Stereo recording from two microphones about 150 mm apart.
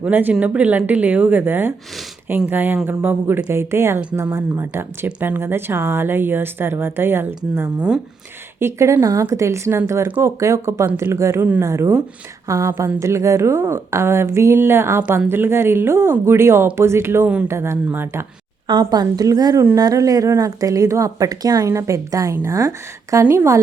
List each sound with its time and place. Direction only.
0.0 s a woman's voice: 10° right (ahead or behind)
18.7 s a woman's voice: 25° right (ahead or behind)